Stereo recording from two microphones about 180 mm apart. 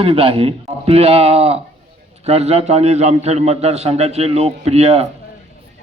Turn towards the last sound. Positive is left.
turn(degrees=-35)  # may be behind; listen again after turning